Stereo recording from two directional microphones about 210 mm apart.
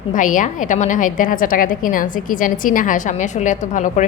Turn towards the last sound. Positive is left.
turn(degrees=35)  # may be behind; listen again after turning